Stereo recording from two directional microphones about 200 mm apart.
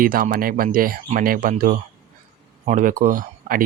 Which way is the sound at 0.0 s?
45° right (ahead or behind).